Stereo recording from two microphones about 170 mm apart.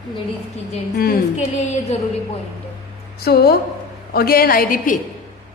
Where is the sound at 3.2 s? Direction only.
65° left (ahead or behind).